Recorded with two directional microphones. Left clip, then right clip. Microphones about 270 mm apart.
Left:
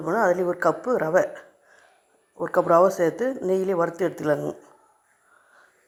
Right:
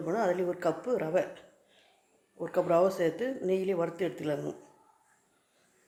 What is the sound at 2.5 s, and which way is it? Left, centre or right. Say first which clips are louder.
Speech: left 8 dB; centre.